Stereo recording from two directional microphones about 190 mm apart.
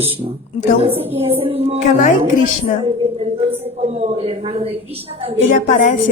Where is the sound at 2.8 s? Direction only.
30° right (ahead or behind).